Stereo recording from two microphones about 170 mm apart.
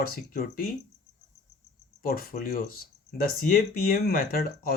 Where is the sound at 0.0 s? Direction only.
60° left (ahead or behind).